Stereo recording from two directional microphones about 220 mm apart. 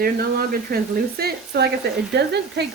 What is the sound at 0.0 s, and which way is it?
Speech, 45° right (ahead or behind).